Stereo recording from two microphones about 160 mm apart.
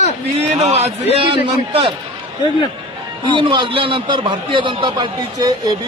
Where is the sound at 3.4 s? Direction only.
30° right (ahead or behind).